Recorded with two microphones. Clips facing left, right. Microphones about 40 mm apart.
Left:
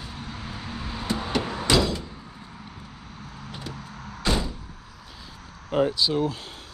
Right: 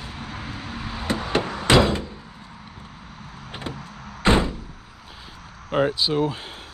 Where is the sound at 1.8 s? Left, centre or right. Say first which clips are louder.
Right 6 dB; right.